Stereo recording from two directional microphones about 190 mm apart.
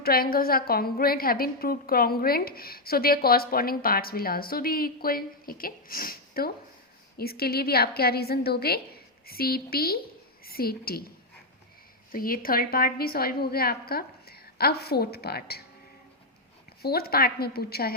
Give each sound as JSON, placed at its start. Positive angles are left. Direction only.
{"t": 0.0, "sound": "a woman's voice", "side_deg": 50}
{"t": 12.1, "sound": "a woman's voice", "side_deg": 50}
{"t": 16.8, "sound": "a woman's voice", "side_deg": 55}